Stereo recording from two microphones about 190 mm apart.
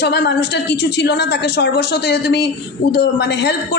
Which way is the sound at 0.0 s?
60° left (ahead or behind).